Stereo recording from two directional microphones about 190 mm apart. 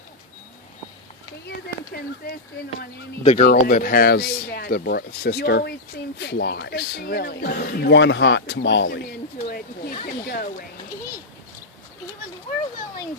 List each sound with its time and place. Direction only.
1.5 s speech: 55° left (ahead or behind)
3.2 s speech: 45° left (ahead or behind)